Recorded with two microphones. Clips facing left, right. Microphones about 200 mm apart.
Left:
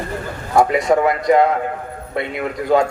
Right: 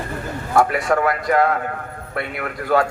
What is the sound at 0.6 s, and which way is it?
A man's voice, 20° left (ahead or behind).